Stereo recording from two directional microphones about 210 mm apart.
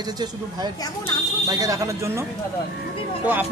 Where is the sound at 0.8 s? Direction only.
15° left (ahead or behind).